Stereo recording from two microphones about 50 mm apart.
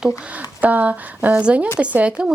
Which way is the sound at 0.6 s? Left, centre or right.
Right.